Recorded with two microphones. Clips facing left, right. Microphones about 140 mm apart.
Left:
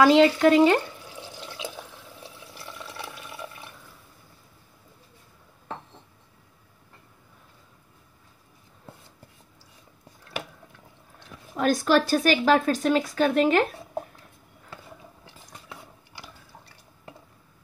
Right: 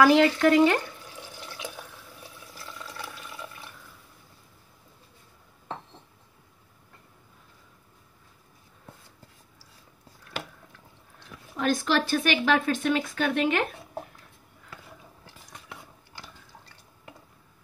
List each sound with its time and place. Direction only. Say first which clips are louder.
0.0 s speech: left 2 dB; 20° left (ahead or behind)
1.3 s water: left 3 dB; 15° left (ahead or behind)
11.5 s speech: left 4 dB; 45° left (ahead or behind)
16.2 s drip: left 1 dB; 15° left (ahead or behind)